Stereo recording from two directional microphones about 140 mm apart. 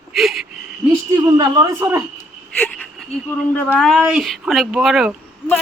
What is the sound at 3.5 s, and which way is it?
Speech, 10° left (ahead or behind).